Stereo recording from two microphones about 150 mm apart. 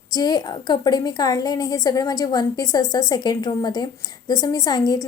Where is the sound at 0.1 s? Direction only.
25° left (ahead or behind).